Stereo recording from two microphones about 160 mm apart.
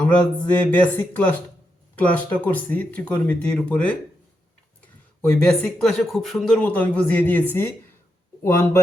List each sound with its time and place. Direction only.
0.0 s speech: 10° left (ahead or behind)
5.2 s speech: 5° left (ahead or behind)